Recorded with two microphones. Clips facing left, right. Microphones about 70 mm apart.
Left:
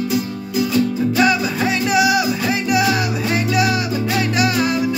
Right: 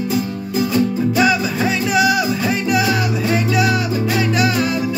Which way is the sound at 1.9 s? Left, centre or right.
Centre.